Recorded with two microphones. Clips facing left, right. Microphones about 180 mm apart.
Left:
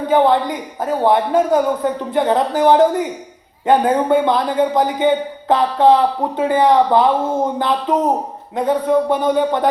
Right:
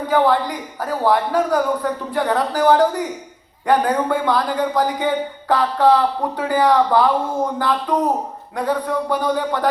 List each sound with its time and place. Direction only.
0.1 s a man's voice: 20° left (ahead or behind)